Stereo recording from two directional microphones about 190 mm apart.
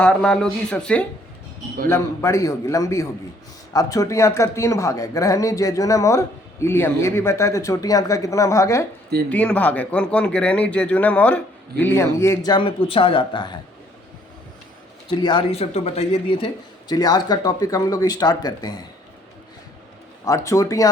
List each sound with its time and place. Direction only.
0.0 s speech: 5° left (ahead or behind)
1.9 s a man's voice: 15° left (ahead or behind)
15.1 s speech: 25° left (ahead or behind)
16.9 s speech: 20° left (ahead or behind)
20.2 s a man's voice: 15° left (ahead or behind)